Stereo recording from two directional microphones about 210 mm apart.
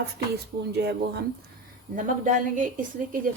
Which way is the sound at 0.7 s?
50° right (ahead or behind).